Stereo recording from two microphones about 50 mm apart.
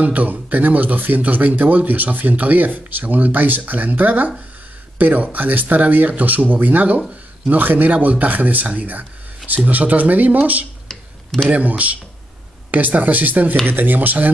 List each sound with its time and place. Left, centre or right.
0.0 s speech: right